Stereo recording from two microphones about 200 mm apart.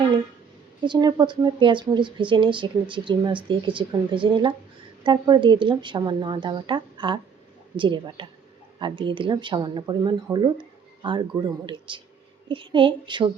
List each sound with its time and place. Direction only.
0.9 s speech: 20° right (ahead or behind)